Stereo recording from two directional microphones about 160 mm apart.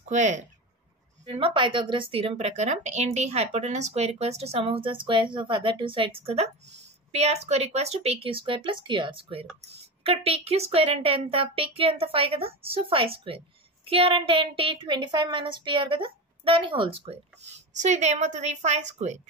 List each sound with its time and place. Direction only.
0.1 s speech: 45° right (ahead or behind)
1.2 s speech: 35° right (ahead or behind)